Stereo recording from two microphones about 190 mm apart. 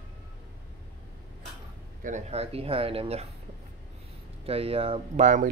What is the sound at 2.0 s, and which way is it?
Speech, 35° right (ahead or behind).